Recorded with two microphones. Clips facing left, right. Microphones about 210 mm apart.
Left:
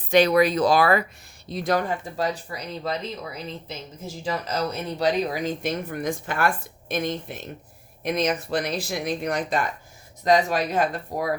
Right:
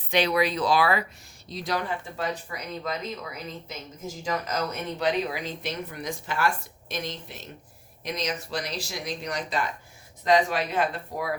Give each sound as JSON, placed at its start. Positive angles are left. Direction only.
{"t": 0.1, "sound": "speech", "side_deg": 45}